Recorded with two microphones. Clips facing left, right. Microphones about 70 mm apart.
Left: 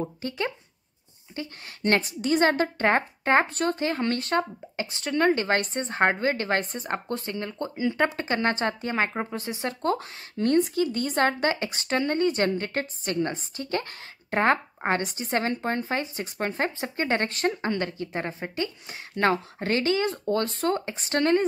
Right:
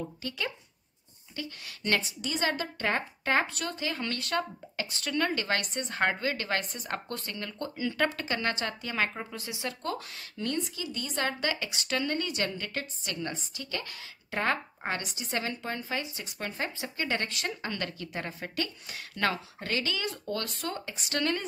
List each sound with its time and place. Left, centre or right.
0.0 s a woman's voice: left